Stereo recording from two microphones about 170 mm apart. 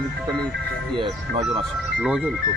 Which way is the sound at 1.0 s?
30° right (ahead or behind).